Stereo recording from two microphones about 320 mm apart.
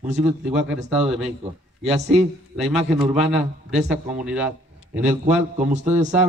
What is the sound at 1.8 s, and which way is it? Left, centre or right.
Speech, centre.